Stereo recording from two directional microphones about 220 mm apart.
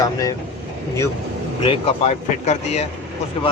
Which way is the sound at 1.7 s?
30° left (ahead or behind).